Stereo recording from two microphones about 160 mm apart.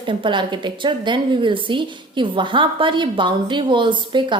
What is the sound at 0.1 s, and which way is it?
A woman's voice, 30° right (ahead or behind).